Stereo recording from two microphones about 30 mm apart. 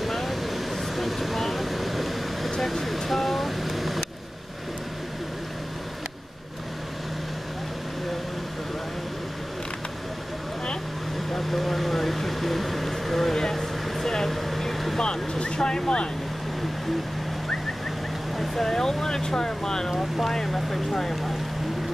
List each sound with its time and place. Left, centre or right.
0.1 s air conditioning: centre
2.6 s speech: centre
11.3 s vehicle: centre
13.4 s a sound: centre
14.1 s vehicle: centre
15.0 s vehicle: left
18.4 s a sound: centre
18.7 s vehicle: centre
19.9 s vehicle: centre
21.0 s speech: centre